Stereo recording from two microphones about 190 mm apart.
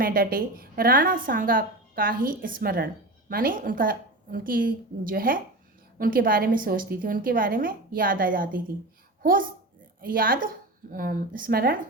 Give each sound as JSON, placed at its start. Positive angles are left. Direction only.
{"t": 0.0, "sound": "a woman's voice", "side_deg": -50}